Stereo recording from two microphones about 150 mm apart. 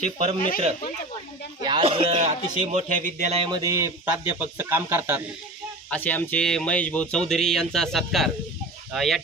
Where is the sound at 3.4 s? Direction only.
25° right (ahead or behind).